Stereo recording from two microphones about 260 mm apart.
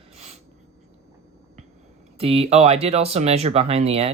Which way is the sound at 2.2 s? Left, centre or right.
Right.